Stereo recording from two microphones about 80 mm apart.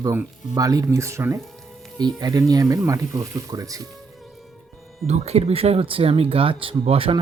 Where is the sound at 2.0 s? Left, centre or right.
Right.